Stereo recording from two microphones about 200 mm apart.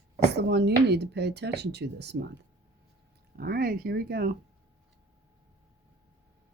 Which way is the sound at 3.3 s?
50° right (ahead or behind).